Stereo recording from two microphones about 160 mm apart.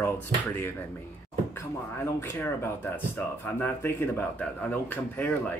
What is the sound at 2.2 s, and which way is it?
Speech, 15° left (ahead or behind).